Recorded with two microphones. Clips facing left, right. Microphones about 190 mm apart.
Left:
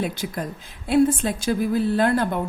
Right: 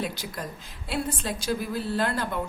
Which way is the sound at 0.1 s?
50° left (ahead or behind).